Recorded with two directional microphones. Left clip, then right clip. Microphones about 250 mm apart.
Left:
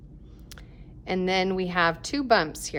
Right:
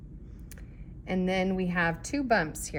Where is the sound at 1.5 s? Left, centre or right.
Centre.